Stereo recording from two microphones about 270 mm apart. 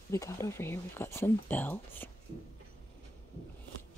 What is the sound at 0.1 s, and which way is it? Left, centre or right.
Speech, centre.